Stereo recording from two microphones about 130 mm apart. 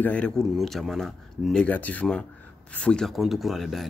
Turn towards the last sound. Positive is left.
turn(degrees=0)  # may be behind; listen again after turning